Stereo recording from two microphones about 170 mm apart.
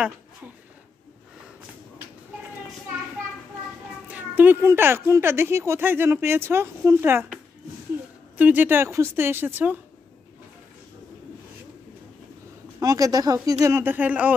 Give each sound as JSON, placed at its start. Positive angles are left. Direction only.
{"t": 4.1, "sound": "speech", "side_deg": -10}
{"t": 8.4, "sound": "speech", "side_deg": -10}
{"t": 12.8, "sound": "speech", "side_deg": -20}